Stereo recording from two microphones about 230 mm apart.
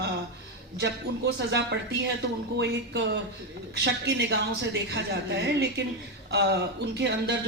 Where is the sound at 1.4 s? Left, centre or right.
Right.